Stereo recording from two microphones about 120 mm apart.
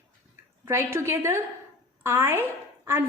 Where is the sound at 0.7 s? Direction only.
20° right (ahead or behind).